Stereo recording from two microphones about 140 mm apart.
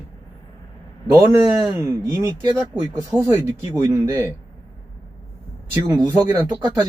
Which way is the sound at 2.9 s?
15° right (ahead or behind).